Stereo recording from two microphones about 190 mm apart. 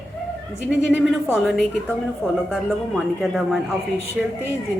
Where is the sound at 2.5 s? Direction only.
Centre (ahead or behind).